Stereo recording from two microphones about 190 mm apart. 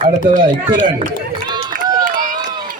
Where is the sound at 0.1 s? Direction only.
40° right (ahead or behind).